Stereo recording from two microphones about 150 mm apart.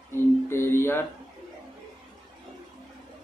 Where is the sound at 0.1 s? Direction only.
15° left (ahead or behind).